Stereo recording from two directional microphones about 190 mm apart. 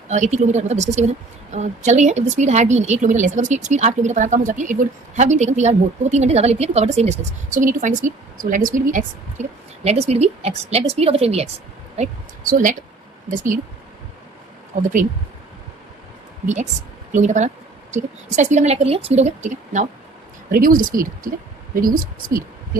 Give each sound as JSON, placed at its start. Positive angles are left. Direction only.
{"t": 0.1, "sound": "a woman's voice", "side_deg": -40}
{"t": 14.8, "sound": "a woman's voice", "side_deg": -40}
{"t": 17.2, "sound": "a woman's voice", "side_deg": -40}